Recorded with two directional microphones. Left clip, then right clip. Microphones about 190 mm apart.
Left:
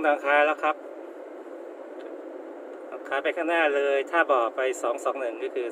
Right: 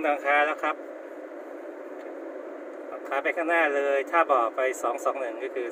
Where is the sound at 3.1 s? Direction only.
5° left (ahead or behind).